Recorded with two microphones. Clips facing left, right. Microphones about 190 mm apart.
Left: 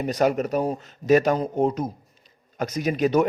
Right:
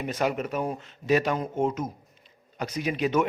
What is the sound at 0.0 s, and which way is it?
A man's voice, 40° left (ahead or behind).